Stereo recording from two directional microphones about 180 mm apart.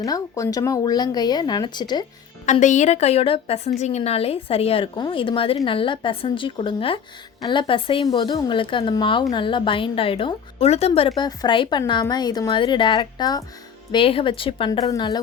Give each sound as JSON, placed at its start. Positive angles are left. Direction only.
{"t": 0.0, "sound": "speech", "side_deg": 20}
{"t": 2.5, "sound": "a woman's voice", "side_deg": 40}